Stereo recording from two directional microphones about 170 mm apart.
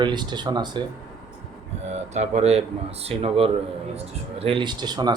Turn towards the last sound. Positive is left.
turn(degrees=-25)  # may be behind; listen again after turning